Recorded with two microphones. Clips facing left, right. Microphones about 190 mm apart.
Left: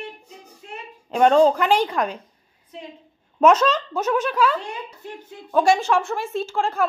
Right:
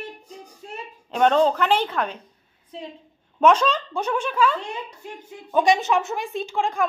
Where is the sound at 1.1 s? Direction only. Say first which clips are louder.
Left 3 dB; 5° left (ahead or behind).